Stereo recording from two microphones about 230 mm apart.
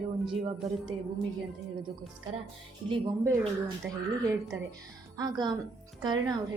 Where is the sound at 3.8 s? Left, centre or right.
Centre.